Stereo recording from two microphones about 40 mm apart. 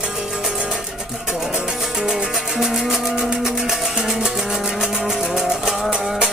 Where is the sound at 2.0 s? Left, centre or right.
Right.